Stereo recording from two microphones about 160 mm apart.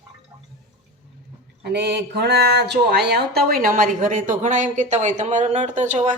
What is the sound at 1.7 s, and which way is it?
Speech, 90° right.